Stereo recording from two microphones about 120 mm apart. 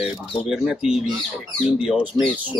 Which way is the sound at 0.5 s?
5° right (ahead or behind).